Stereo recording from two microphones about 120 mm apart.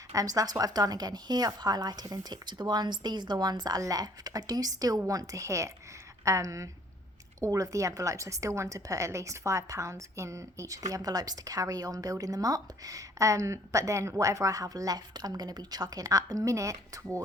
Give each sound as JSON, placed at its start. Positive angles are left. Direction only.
{"t": 0.1, "sound": "a woman's voice", "side_deg": -30}